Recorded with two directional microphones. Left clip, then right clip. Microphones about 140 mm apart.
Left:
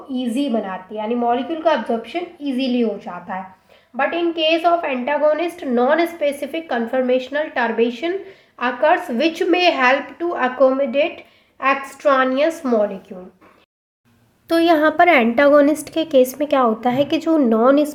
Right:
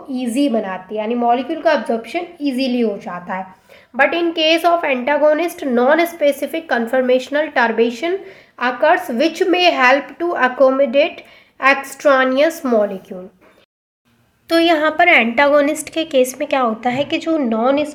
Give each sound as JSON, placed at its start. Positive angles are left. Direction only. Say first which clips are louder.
{"t": 0.1, "sound": "a woman's voice", "louder": "right 4 dB", "side_deg": -35}
{"t": 3.9, "sound": "a woman's voice", "louder": "right 4 dB", "side_deg": -50}
{"t": 14.4, "sound": "a woman's voice", "louder": "right 1 dB", "side_deg": 30}